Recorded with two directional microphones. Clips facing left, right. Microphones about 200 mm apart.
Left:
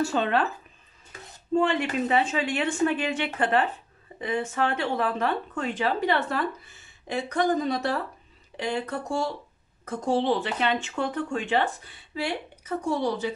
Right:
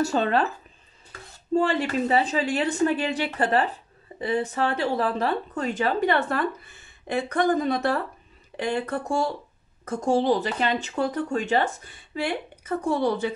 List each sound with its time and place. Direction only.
0.0 s speech: 40° right (ahead or behind)
1.5 s speech: 35° right (ahead or behind); by 13.3 s 55° right (ahead or behind)